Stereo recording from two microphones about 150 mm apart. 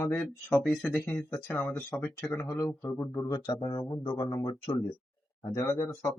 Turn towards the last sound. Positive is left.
turn(degrees=25)  # may be behind; listen again after turning